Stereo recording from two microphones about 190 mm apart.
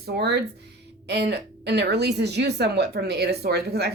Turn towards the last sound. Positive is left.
turn(degrees=-60)  # may be behind; listen again after turning